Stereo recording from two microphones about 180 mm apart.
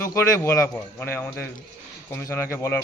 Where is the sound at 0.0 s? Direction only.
15° left (ahead or behind).